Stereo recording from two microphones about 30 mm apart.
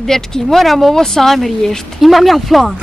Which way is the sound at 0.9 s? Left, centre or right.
Centre.